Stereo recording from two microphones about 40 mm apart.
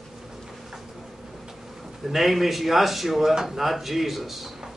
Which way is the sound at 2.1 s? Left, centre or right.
Centre.